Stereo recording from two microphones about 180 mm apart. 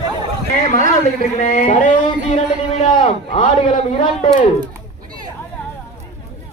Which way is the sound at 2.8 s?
30° left (ahead or behind).